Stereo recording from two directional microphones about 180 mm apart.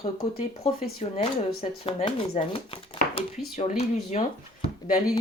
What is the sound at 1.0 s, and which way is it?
Speech, 35° left (ahead or behind).